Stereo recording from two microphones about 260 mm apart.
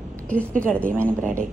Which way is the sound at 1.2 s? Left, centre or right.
Right.